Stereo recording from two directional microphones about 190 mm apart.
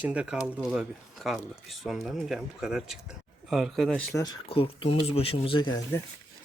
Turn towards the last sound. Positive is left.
turn(degrees=25)  # may be behind; listen again after turning